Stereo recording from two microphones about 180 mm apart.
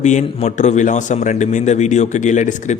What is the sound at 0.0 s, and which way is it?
A man's voice, 40° left (ahead or behind).